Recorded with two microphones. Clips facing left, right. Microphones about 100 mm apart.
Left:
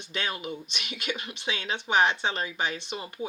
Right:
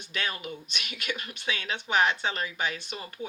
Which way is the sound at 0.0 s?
25° left (ahead or behind).